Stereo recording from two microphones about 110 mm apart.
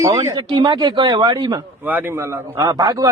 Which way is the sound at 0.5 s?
45° right (ahead or behind).